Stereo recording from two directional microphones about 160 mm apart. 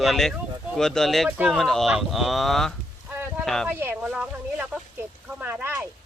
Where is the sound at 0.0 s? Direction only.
Centre (ahead or behind).